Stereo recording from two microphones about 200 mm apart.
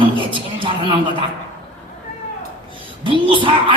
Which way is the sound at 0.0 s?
25° right (ahead or behind).